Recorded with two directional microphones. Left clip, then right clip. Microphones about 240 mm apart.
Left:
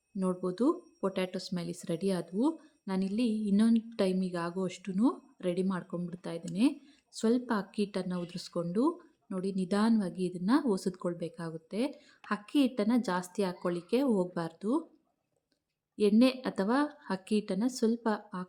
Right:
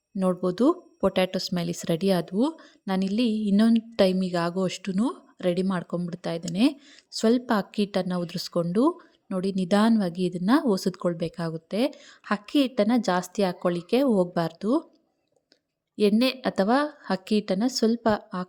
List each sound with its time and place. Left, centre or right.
0.2 s a woman's voice: right
16.0 s a woman's voice: right